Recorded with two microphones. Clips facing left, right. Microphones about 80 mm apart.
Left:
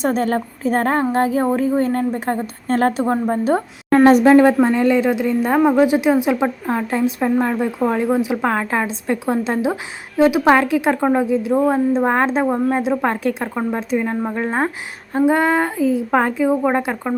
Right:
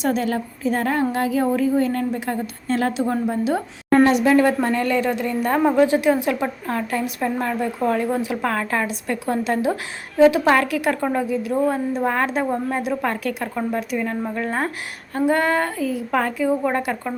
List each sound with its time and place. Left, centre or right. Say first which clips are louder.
0.0 s a woman's voice: left 3 dB; left